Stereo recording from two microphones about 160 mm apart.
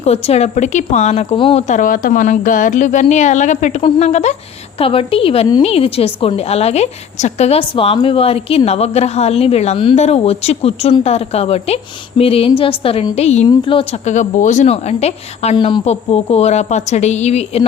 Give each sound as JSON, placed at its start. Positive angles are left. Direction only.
{"t": 0.0, "sound": "a woman's voice", "side_deg": 40}
{"t": 1.6, "sound": "a woman's voice", "side_deg": 55}
{"t": 15.5, "sound": "speech", "side_deg": 30}
{"t": 15.8, "sound": "a woman's voice", "side_deg": 40}